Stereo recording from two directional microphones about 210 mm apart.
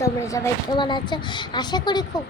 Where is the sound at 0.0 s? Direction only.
15° left (ahead or behind).